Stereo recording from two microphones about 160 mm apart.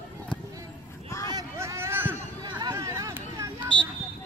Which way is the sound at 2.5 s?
20° right (ahead or behind).